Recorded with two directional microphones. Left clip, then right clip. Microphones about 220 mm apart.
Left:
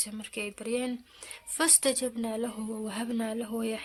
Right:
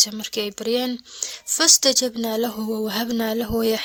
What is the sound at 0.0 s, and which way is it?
Speech, 35° right (ahead or behind).